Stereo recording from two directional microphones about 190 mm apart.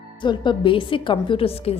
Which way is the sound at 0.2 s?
25° left (ahead or behind).